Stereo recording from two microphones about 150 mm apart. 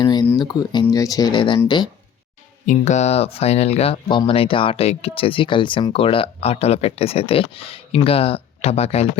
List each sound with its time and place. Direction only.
0.0 s a sound: 30° left (ahead or behind)
0.3 s speech: 30° left (ahead or behind)
2.6 s speech: 50° left (ahead or behind)